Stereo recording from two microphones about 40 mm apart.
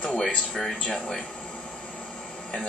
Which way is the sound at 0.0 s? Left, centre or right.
Centre.